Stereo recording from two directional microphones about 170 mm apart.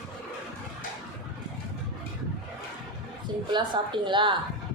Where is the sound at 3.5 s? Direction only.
25° right (ahead or behind).